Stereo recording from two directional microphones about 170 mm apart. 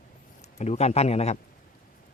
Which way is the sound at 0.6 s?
40° left (ahead or behind).